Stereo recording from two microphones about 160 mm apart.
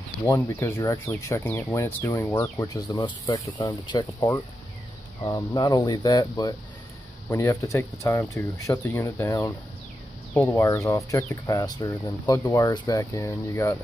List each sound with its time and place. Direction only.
0.5 s speech: 15° left (ahead or behind)
10.5 s speech: 20° left (ahead or behind)